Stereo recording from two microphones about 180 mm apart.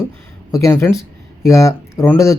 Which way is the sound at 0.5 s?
15° left (ahead or behind).